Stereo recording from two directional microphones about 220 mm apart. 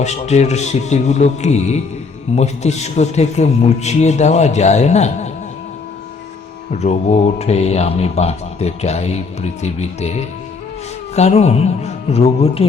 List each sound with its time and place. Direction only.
0.0 s a man's voice: 30° left (ahead or behind)
6.7 s speech: 30° left (ahead or behind)